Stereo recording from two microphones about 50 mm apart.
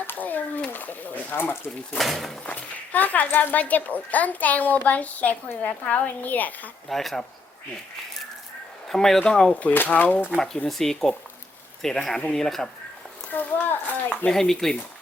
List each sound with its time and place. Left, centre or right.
0.1 s a child's voice: left
2.0 s speech: centre
2.5 s a child's voice: left
6.8 s speech: centre
8.9 s speech: centre
9.7 s a child's voice: left
10.2 s speech: centre
12.1 s speech: centre
13.3 s a child's voice: left
14.3 s speech: centre